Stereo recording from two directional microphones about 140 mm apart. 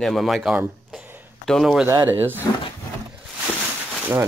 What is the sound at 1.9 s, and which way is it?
Speech, 15° right (ahead or behind).